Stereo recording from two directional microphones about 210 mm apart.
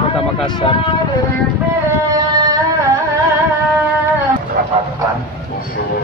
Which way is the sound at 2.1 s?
20° right (ahead or behind).